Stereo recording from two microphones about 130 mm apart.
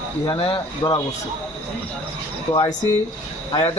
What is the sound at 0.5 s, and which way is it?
Speech, 30° left (ahead or behind).